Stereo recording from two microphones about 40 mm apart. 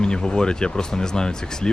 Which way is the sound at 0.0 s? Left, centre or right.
Left.